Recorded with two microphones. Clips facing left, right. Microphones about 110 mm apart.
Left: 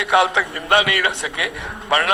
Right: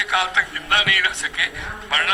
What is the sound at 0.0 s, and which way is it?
A man's voice, 40° left (ahead or behind).